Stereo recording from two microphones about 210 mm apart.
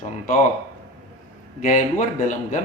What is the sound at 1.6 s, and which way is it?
A man's voice, 35° left (ahead or behind).